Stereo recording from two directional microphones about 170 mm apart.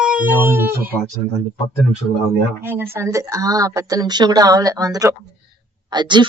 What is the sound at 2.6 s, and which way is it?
Speech, 15° right (ahead or behind).